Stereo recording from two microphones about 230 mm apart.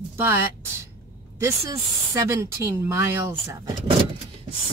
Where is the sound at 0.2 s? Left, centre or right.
Centre.